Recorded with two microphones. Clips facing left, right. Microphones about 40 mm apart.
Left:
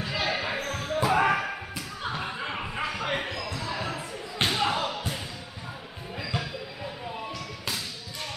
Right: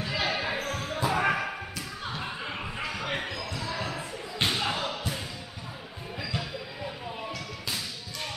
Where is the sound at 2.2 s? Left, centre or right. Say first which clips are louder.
Left 2 dB; centre.